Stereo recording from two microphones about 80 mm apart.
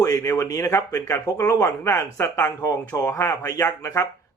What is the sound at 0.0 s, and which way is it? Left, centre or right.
Speech, left.